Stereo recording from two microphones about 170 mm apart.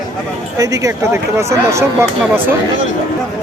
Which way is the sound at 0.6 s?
20° right (ahead or behind).